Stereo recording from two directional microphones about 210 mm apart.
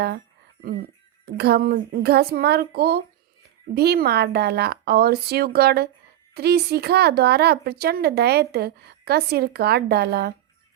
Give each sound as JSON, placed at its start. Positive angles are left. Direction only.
{"t": 0.8, "sound": "speech", "side_deg": -50}